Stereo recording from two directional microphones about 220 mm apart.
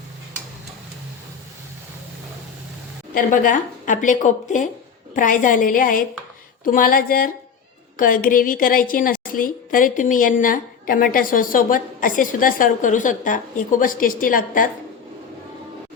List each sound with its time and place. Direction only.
3.2 s a woman's voice: 35° left (ahead or behind)